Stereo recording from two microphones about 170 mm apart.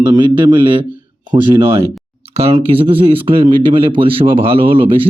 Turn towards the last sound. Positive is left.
turn(degrees=-35)  # may be behind; listen again after turning